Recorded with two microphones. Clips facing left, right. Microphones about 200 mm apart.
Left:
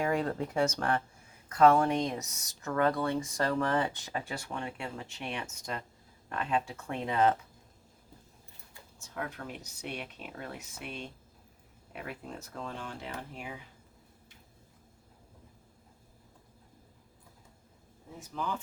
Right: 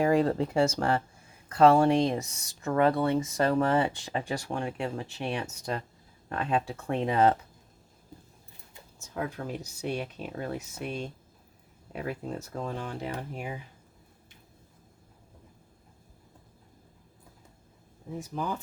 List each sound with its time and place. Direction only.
0.0 s speech: 35° right (ahead or behind)
9.0 s speech: 35° right (ahead or behind)
18.3 s speech: 45° right (ahead or behind)